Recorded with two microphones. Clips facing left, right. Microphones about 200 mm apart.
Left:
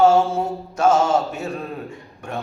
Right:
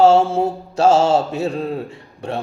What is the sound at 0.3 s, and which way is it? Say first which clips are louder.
Speech: right 5 dB; 30° right (ahead or behind).